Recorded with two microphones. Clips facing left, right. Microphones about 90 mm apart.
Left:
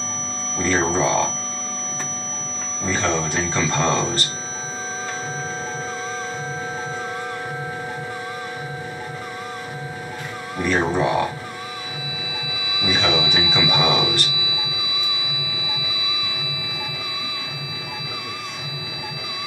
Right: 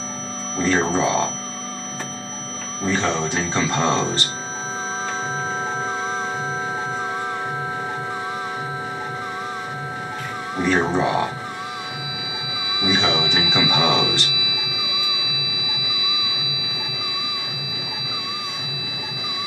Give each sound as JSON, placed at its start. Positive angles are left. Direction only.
{"t": 0.6, "sound": "speech", "side_deg": -10}
{"t": 2.8, "sound": "speech", "side_deg": -10}
{"t": 10.6, "sound": "speech", "side_deg": -20}
{"t": 12.8, "sound": "a sound", "side_deg": -20}